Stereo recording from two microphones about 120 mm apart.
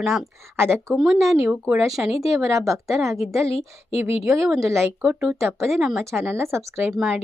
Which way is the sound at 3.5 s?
55° left (ahead or behind).